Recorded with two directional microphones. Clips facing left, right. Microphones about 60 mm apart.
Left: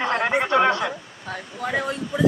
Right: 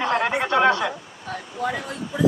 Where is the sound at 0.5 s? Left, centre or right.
Centre.